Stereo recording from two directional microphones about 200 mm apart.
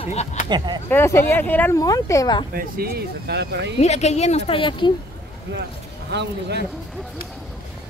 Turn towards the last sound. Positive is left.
turn(degrees=-55)  # may be behind; listen again after turning